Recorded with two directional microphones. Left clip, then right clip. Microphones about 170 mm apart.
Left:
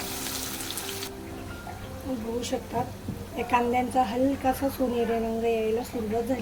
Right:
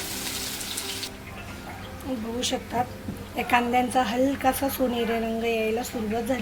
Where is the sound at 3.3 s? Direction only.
Centre (ahead or behind).